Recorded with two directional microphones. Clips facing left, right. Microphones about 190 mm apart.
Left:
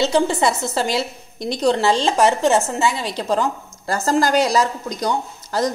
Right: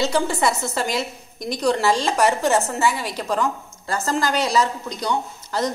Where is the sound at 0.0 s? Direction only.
25° left (ahead or behind).